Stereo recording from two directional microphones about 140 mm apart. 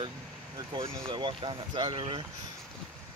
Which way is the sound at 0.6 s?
30° right (ahead or behind).